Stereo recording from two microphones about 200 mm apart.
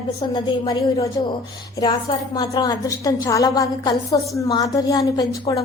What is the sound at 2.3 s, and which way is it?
A woman's voice, 20° left (ahead or behind).